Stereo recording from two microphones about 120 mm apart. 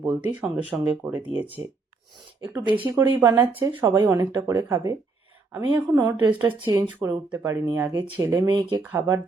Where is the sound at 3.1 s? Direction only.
25° right (ahead or behind).